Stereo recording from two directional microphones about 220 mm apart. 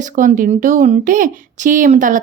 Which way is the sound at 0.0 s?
35° right (ahead or behind).